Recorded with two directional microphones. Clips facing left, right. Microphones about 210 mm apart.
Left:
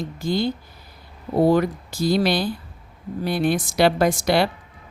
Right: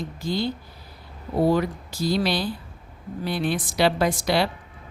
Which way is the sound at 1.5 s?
50° left (ahead or behind).